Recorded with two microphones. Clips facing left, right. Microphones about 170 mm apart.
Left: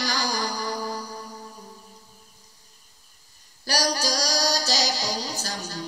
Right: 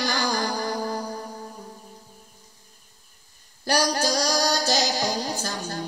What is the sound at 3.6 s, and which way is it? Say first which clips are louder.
Music: right 3 dB; 55° right (ahead or behind).